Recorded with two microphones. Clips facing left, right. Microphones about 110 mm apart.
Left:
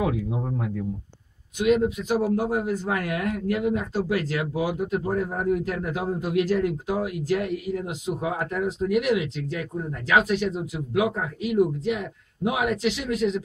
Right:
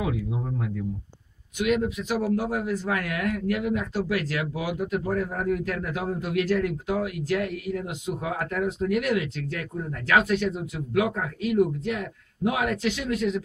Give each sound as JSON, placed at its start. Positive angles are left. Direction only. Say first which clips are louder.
{"t": 1.6, "sound": "a man's voice", "louder": "left 3 dB", "side_deg": 35}
{"t": 13.1, "sound": "speech", "louder": "left 2 dB", "side_deg": 25}